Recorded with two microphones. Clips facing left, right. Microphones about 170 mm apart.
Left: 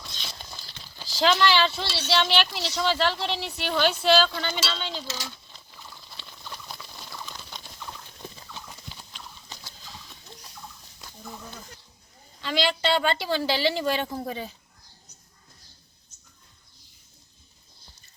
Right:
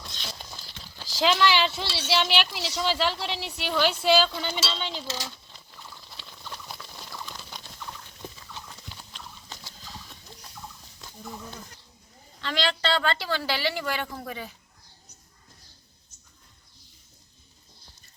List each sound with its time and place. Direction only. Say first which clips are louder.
0.2 s speech: right 3 dB; 5° right (ahead or behind)
6.1 s rodents: even; centre (ahead or behind)
7.3 s fowl: even; centre (ahead or behind)
12.4 s a woman's voice: left 2 dB; 10° left (ahead or behind); by 14.5 s 25° left (ahead or behind)